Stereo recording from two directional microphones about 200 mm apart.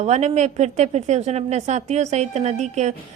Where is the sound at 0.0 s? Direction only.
35° right (ahead or behind).